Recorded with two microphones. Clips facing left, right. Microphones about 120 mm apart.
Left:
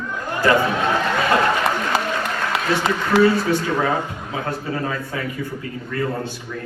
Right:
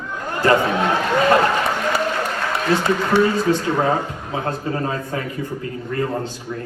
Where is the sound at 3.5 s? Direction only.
25° right (ahead or behind).